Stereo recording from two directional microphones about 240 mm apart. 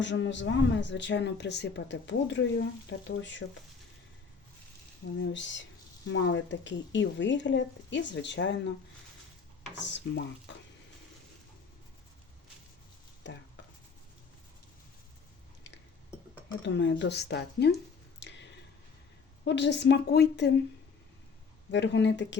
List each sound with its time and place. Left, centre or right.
0.0 s speech: left
5.1 s speech: left
9.8 s speech: left
13.2 s speech: left
16.5 s speech: left
18.2 s a sound: left
19.5 s speech: left
21.7 s speech: left